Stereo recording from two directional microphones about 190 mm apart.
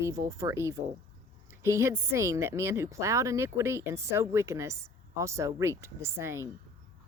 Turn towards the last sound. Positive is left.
turn(degrees=-15)  # may be behind; listen again after turning